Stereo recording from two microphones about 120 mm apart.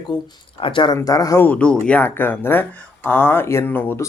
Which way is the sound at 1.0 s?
30° left (ahead or behind).